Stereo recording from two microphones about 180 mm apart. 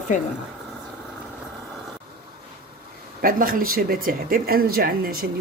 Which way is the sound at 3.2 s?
50° right (ahead or behind).